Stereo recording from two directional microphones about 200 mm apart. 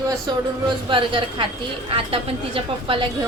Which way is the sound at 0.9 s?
25° right (ahead or behind).